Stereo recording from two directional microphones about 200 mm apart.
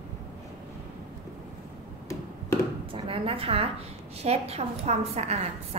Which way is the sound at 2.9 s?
25° right (ahead or behind).